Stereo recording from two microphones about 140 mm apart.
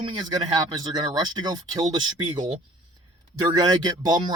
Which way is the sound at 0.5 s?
35° right (ahead or behind).